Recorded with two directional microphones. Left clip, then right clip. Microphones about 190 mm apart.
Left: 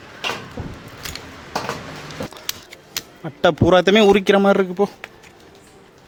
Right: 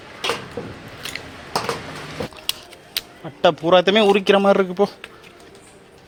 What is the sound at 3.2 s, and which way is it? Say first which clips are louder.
A man's voice: left 1 dB; 35° left (ahead or behind).